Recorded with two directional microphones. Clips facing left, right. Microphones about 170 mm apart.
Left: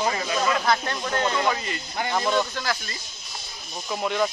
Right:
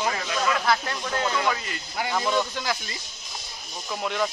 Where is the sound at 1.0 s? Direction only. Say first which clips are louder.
Left 2 dB; 5° right (ahead or behind).